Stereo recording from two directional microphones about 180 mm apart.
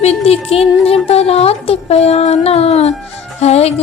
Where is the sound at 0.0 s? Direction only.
35° left (ahead or behind).